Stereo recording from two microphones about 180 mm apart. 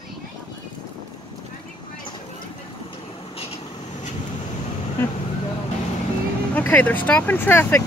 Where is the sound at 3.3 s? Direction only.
35° left (ahead or behind).